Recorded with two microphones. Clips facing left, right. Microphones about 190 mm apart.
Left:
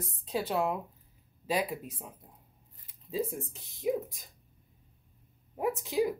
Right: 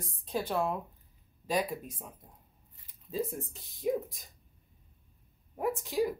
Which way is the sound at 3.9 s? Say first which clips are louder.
Even; 5° left (ahead or behind).